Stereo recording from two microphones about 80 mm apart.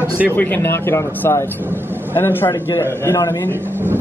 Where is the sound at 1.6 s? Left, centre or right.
Right.